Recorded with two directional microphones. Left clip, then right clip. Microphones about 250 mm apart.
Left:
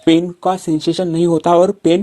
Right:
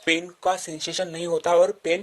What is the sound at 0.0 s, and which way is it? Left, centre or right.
Speech, left.